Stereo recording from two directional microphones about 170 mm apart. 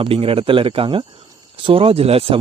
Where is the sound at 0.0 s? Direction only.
35° right (ahead or behind).